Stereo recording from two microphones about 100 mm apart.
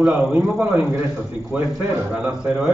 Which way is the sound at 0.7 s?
20° right (ahead or behind).